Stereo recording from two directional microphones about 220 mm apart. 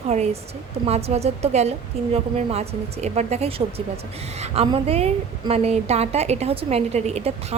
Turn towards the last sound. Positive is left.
turn(degrees=-30)  # may be behind; listen again after turning